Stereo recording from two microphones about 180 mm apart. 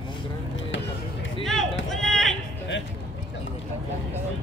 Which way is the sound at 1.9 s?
Centre (ahead or behind).